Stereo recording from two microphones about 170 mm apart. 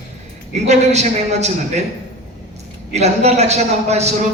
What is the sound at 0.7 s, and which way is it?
Speech, 40° right (ahead or behind).